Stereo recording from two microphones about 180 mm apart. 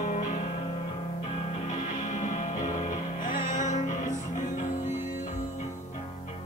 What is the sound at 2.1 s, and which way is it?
Music, 45° left (ahead or behind).